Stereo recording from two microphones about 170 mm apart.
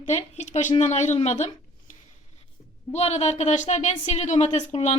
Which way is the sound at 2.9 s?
40° left (ahead or behind).